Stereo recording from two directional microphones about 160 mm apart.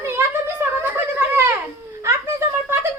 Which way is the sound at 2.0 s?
15° right (ahead or behind).